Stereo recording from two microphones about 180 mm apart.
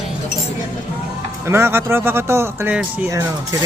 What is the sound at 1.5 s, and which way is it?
Speech, 15° right (ahead or behind).